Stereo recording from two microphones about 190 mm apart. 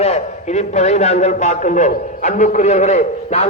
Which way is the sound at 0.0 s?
35° left (ahead or behind).